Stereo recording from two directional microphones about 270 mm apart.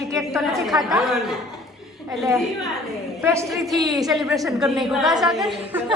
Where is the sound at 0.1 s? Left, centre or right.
Centre.